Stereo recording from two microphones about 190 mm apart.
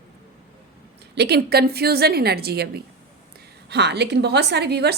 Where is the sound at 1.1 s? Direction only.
60° right (ahead or behind).